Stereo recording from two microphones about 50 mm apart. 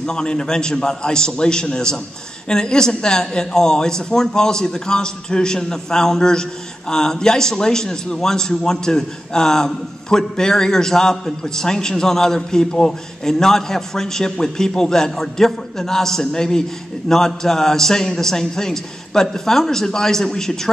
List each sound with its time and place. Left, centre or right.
0.0 s a man's voice: centre